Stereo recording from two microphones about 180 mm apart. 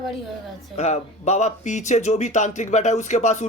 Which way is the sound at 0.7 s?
40° left (ahead or behind).